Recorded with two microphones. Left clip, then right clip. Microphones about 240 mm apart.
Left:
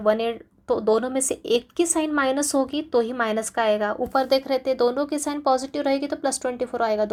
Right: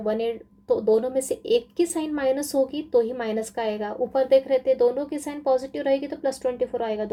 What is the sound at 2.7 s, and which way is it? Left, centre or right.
Speech, centre.